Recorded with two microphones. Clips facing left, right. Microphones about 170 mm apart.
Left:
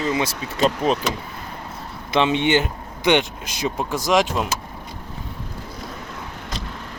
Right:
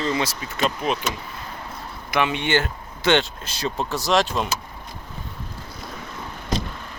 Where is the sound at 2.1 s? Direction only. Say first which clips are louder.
Left 3 dB; 20° left (ahead or behind).